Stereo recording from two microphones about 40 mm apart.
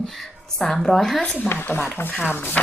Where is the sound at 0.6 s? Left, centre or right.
Centre.